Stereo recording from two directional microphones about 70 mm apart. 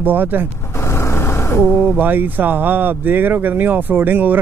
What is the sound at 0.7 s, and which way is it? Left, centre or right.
Vehicle, left.